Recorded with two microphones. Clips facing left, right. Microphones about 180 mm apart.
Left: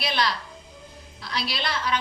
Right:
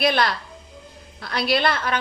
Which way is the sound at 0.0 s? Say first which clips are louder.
Right 6 dB; 55° right (ahead or behind).